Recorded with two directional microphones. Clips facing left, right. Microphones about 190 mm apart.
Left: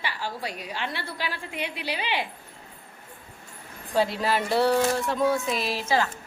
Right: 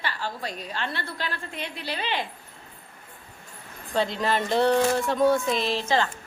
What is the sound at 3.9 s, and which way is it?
A woman's voice, 5° left (ahead or behind).